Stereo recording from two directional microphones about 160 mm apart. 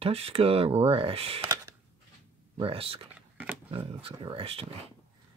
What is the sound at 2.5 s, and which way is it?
Speech, 35° right (ahead or behind).